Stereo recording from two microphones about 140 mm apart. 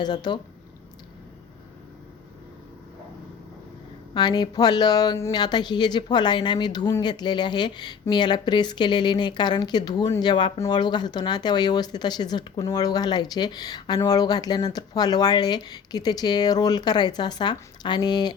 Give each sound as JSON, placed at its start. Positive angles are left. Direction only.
{"t": 0.0, "sound": "speech", "side_deg": 30}
{"t": 4.1, "sound": "speech", "side_deg": 30}